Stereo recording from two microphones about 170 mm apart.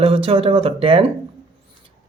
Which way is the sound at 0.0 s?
35° right (ahead or behind).